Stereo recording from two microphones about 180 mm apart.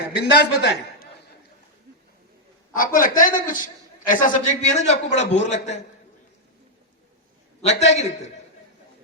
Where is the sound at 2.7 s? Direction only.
50° left (ahead or behind).